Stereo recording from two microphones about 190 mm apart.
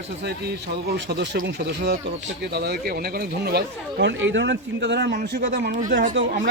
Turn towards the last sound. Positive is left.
turn(degrees=-65)  # may be behind; listen again after turning